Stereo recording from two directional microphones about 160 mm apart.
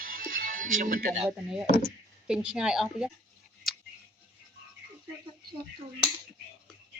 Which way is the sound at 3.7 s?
Centre (ahead or behind).